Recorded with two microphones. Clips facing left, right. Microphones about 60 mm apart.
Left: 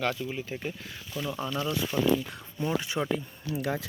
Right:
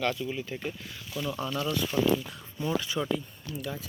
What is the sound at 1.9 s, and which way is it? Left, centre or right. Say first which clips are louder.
Speech: right 1 dB; centre.